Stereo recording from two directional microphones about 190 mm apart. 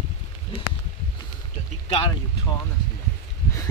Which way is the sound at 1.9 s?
30° left (ahead or behind).